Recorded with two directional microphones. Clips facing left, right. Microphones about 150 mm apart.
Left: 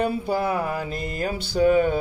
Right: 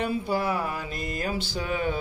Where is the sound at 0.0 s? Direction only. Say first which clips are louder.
Left 3 dB; 50° left (ahead or behind).